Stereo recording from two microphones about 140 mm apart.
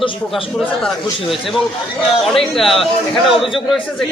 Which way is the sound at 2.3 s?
Centre (ahead or behind).